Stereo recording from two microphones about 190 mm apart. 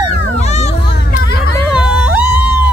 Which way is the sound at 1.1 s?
55° left (ahead or behind).